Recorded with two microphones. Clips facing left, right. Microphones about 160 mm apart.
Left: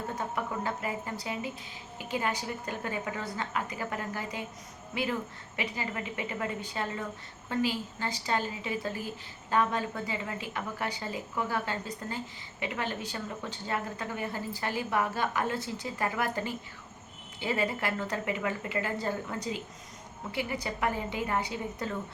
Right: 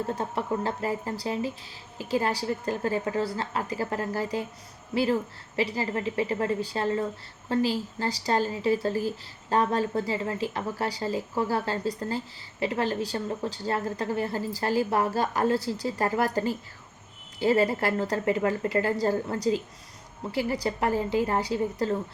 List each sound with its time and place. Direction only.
0.2 s speech: 30° right (ahead or behind)
5.5 s speech: 35° right (ahead or behind)